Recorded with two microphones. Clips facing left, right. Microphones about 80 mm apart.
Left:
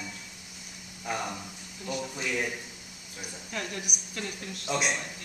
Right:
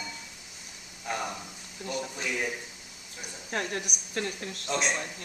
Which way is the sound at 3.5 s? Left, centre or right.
Right.